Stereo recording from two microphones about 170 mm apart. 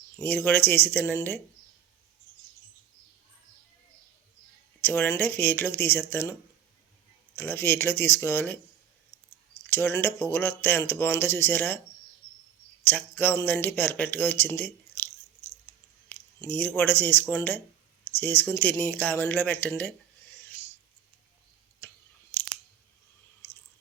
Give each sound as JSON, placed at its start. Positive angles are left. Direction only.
{"t": 0.2, "sound": "speech", "side_deg": 15}
{"t": 4.8, "sound": "speech", "side_deg": 10}
{"t": 7.3, "sound": "speech", "side_deg": 15}
{"t": 9.6, "sound": "speech", "side_deg": 15}
{"t": 12.8, "sound": "speech", "side_deg": 10}
{"t": 22.3, "sound": "chewing", "side_deg": 10}